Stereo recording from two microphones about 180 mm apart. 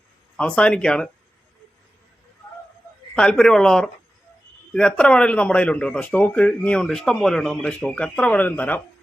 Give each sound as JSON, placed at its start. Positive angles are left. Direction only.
{"t": 0.3, "sound": "speech", "side_deg": 5}
{"t": 3.2, "sound": "speech", "side_deg": 5}